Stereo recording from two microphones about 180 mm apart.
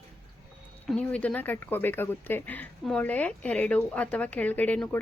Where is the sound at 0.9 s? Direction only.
5° left (ahead or behind).